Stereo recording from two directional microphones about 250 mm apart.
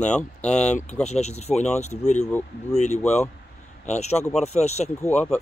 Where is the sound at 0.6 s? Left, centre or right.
Left.